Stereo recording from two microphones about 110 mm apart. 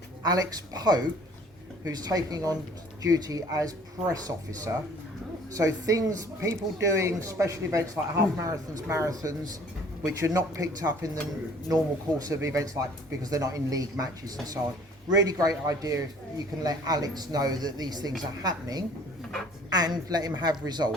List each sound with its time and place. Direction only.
0.3 s speech: 35° right (ahead or behind)
12.2 s speech: 30° right (ahead or behind)